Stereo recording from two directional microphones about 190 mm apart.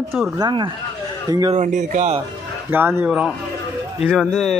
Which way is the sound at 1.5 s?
40° right (ahead or behind).